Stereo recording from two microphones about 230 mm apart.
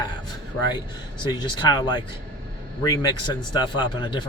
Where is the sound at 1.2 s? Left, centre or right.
Centre.